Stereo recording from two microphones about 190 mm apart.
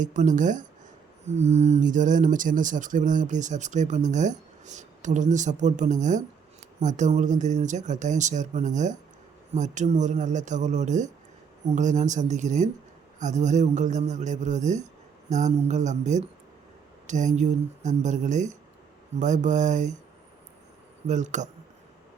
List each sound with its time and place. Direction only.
0.0 s speech: 40° right (ahead or behind)
21.1 s speech: 40° right (ahead or behind)